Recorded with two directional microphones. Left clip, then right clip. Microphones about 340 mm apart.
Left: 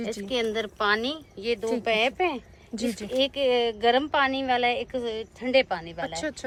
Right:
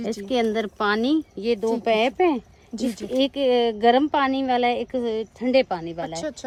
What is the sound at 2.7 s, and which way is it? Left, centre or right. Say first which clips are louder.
Speech: right 2 dB; centre.